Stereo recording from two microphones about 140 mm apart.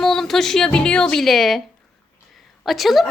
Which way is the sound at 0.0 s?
Centre (ahead or behind).